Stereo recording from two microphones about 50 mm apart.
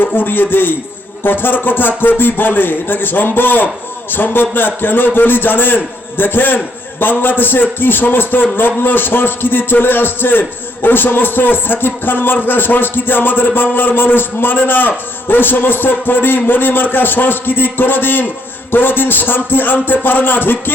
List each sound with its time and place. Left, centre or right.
0.0 s a man's voice: left